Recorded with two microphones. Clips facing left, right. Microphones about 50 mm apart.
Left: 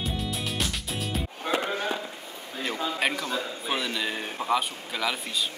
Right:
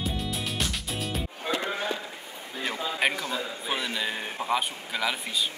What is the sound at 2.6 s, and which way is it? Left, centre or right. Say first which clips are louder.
Speech: even; centre.